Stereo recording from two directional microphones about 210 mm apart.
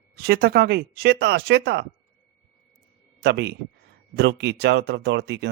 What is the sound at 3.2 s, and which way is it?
Speech, 50° right (ahead or behind).